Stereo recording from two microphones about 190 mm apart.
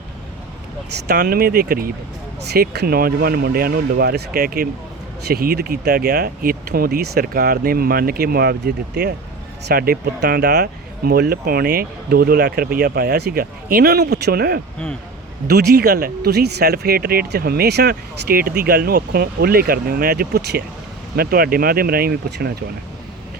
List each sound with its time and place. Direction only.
1.0 s speech: 55° right (ahead or behind)